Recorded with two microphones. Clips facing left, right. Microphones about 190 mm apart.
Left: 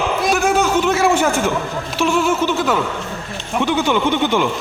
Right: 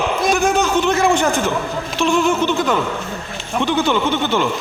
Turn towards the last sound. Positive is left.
turn(degrees=15)  # may be behind; listen again after turning